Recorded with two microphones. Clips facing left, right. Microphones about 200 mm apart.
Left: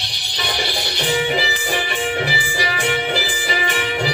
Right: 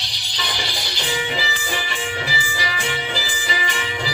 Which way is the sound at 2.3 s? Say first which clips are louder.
Left 4 dB; 55° left (ahead or behind).